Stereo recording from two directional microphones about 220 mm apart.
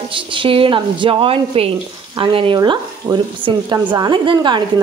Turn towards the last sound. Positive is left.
turn(degrees=-20)  # may be behind; listen again after turning